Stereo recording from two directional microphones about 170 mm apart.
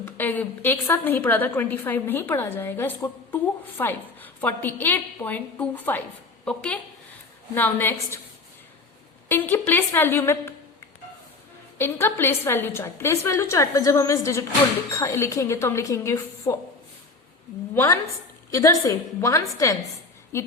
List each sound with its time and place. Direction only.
0.0 s a woman's voice: 10° left (ahead or behind)
9.3 s a woman's voice: 10° left (ahead or behind)
11.8 s a woman's voice: 15° left (ahead or behind)
18.5 s a woman's voice: 20° left (ahead or behind)